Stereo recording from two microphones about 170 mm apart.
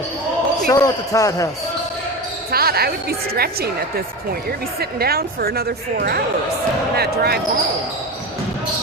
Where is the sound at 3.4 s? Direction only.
65° right (ahead or behind).